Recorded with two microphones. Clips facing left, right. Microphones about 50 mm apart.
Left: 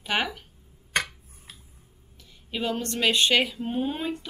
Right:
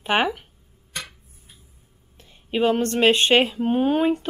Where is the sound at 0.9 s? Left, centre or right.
Left.